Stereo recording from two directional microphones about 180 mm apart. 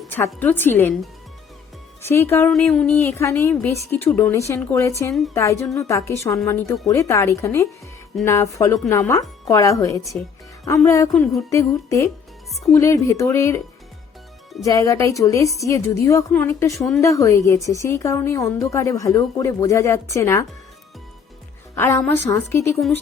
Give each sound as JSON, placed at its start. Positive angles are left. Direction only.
{"t": 0.1, "sound": "a woman's voice", "side_deg": 10}
{"t": 2.0, "sound": "a woman's voice", "side_deg": 15}
{"t": 2.5, "sound": "a sound", "side_deg": 5}
{"t": 3.0, "sound": "a woman's voice", "side_deg": 15}
{"t": 11.1, "sound": "a sound", "side_deg": 0}
{"t": 11.4, "sound": "a woman's voice", "side_deg": 15}
{"t": 14.6, "sound": "a woman's voice", "side_deg": 20}
{"t": 21.8, "sound": "a woman's voice", "side_deg": 15}